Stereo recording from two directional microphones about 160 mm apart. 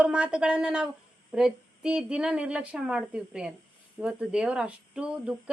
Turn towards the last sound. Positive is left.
turn(degrees=-5)  # may be behind; listen again after turning